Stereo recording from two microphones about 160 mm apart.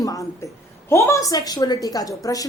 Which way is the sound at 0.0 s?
20° left (ahead or behind).